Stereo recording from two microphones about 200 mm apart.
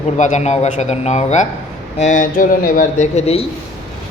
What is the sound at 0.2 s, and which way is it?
Speech, 35° left (ahead or behind).